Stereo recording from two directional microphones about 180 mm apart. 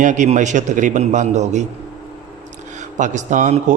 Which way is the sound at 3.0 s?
45° right (ahead or behind).